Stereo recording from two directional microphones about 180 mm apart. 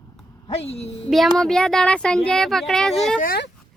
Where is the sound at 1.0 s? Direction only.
Centre (ahead or behind).